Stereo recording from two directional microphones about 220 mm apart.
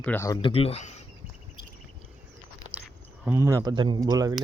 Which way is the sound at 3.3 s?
10° right (ahead or behind).